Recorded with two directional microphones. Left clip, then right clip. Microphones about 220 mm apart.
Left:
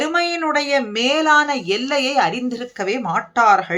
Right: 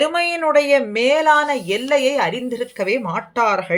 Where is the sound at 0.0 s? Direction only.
5° left (ahead or behind).